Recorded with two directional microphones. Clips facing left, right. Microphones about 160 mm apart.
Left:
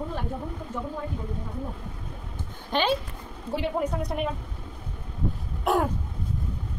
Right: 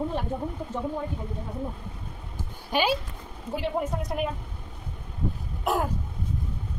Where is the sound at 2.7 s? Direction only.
10° right (ahead or behind).